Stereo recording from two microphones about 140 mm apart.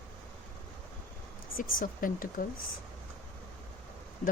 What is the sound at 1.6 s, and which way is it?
Speech, 85° left.